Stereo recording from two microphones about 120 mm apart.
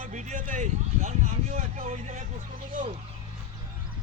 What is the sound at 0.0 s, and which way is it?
Speech, 75° right (ahead or behind).